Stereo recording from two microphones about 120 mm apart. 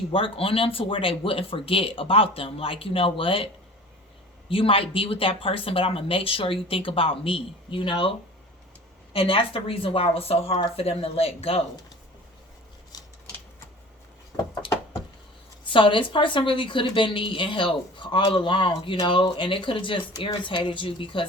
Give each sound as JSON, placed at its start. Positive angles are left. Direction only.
{"t": 0.1, "sound": "speech", "side_deg": 50}
{"t": 9.1, "sound": "speech", "side_deg": 50}
{"t": 12.9, "sound": "scissors", "side_deg": 30}
{"t": 15.6, "sound": "speech", "side_deg": 45}